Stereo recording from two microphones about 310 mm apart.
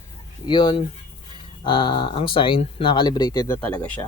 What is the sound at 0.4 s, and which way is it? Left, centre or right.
Speech, centre.